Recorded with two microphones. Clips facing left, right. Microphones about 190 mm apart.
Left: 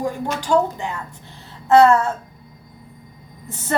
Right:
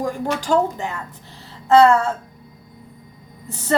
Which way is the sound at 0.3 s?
45° right (ahead or behind).